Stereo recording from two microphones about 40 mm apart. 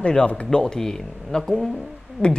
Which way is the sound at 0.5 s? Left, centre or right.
Centre.